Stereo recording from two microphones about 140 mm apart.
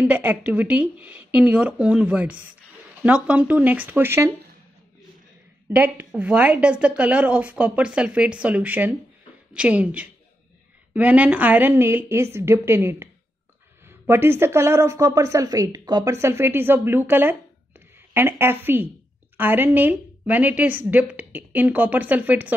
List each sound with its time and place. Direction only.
0.0 s speech: 15° right (ahead or behind)
5.7 s speech: 10° right (ahead or behind)